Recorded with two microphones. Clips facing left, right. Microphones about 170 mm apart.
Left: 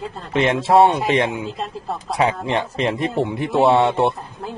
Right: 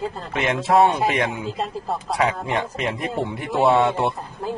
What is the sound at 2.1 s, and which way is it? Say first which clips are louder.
Speech: left 3 dB; 25° left (ahead or behind).